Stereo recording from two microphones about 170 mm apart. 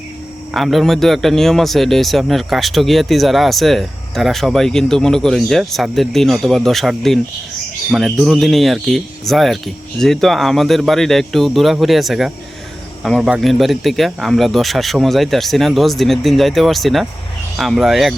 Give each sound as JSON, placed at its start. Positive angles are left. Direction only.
{"t": 0.5, "sound": "a man's voice", "side_deg": 0}